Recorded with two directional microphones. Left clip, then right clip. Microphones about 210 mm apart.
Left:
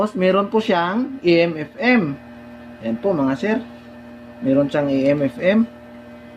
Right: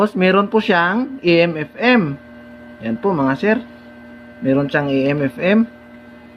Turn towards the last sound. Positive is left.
turn(degrees=-25)  # may be behind; listen again after turning